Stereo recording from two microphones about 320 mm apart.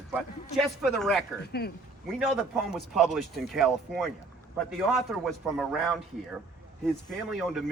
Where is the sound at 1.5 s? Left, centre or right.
Left.